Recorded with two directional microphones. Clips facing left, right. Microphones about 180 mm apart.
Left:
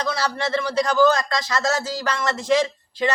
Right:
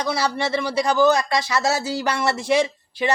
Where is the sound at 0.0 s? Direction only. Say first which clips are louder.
Right 2 dB; 10° right (ahead or behind).